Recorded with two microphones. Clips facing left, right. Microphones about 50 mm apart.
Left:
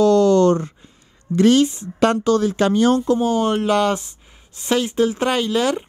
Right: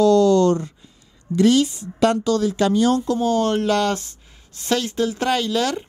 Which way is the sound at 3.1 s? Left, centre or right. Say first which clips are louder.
Left 2 dB; left.